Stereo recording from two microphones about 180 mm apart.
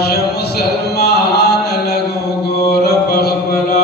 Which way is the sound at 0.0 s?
65° left (ahead or behind).